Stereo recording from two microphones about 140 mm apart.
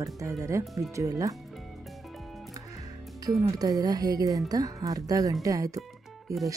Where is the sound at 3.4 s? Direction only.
25° right (ahead or behind).